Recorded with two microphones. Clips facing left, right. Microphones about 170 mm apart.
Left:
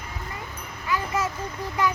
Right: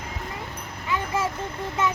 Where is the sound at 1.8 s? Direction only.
25° right (ahead or behind).